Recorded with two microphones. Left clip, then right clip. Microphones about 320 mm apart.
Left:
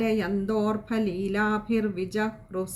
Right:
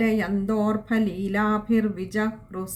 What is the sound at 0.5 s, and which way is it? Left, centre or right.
Speech, right.